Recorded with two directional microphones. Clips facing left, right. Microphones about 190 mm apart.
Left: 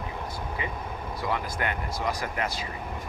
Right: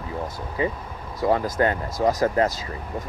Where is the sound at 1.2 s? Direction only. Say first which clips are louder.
Right 10 dB; 40° right (ahead or behind).